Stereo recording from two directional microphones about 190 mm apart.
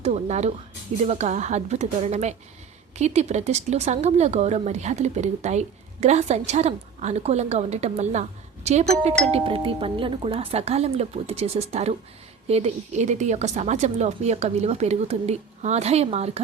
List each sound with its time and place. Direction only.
0.0 s speech: 35° right (ahead or behind)